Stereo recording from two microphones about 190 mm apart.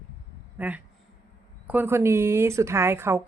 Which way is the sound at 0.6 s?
10° right (ahead or behind).